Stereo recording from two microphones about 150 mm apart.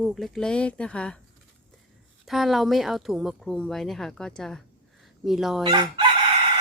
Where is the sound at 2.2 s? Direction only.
Centre (ahead or behind).